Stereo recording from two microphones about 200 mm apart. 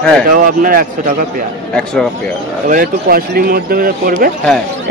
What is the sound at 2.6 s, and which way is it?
A man's voice, 45° right (ahead or behind).